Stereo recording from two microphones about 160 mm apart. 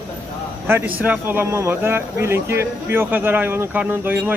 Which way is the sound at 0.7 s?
10° right (ahead or behind).